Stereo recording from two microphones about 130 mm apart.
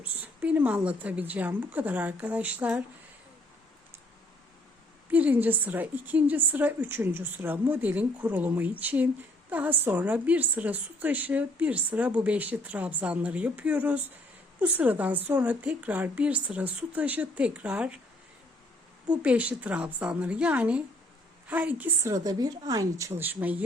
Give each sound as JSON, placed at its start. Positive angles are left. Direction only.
{"t": 0.0, "sound": "a woman's voice", "side_deg": -15}
{"t": 5.1, "sound": "a woman's voice", "side_deg": -15}
{"t": 19.2, "sound": "a woman's voice", "side_deg": -10}
{"t": 22.1, "sound": "a woman's voice", "side_deg": -30}